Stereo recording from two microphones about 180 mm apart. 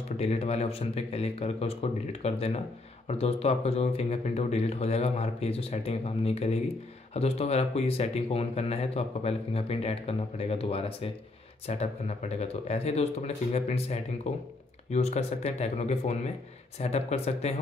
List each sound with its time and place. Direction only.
0.2 s speech: 35° left (ahead or behind)